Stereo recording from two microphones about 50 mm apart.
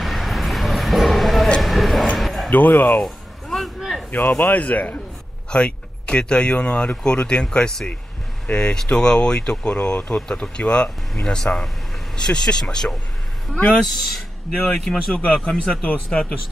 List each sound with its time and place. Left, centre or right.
0.0 s vehicle: centre
1.6 s a sound: centre
2.5 s speech: left
3.4 s a sound: centre
4.4 s speech: left
5.5 s speech: left